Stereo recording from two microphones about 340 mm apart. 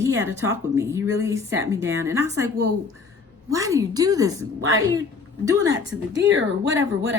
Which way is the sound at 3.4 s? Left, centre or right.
Centre.